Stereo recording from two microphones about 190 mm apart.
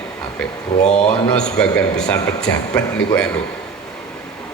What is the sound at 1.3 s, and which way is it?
Speech, 5° left (ahead or behind).